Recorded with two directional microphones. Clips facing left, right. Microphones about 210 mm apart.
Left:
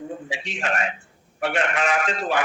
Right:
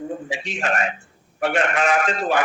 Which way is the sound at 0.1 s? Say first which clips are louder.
Right 3 dB; 45° right (ahead or behind).